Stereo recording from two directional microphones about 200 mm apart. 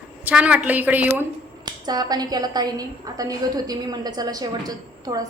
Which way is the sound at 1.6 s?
20° right (ahead or behind).